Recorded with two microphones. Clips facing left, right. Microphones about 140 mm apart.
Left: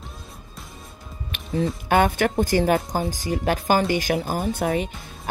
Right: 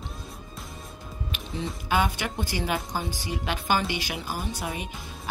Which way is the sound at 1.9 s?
55° left (ahead or behind).